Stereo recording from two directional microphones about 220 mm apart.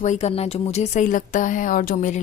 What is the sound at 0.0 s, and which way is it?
Speech, 30° left (ahead or behind).